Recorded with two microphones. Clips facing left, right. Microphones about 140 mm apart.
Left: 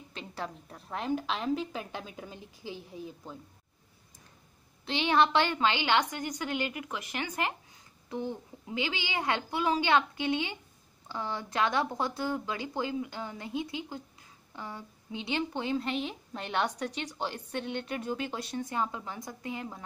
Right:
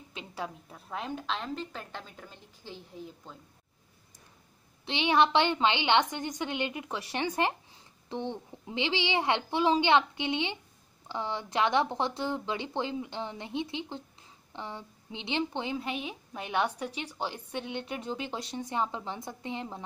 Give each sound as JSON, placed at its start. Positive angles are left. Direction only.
{"t": 0.1, "sound": "a sound", "side_deg": -10}
{"t": 0.8, "sound": "a woman's voice", "side_deg": 0}
{"t": 4.8, "sound": "a woman's voice", "side_deg": -20}